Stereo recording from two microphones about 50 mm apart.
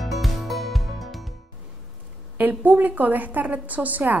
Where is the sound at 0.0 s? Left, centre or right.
Centre.